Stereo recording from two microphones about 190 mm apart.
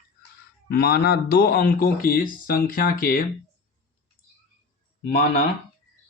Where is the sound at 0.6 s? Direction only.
55° left (ahead or behind).